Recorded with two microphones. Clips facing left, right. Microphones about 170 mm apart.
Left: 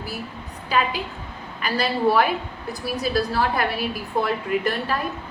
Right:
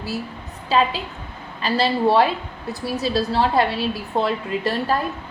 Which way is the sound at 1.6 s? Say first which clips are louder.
Right 2 dB; 25° right (ahead or behind).